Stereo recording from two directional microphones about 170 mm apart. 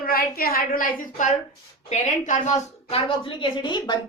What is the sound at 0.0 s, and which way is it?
A woman's voice, 60° left (ahead or behind).